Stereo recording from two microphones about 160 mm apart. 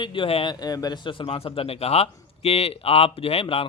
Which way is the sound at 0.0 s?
30° left (ahead or behind).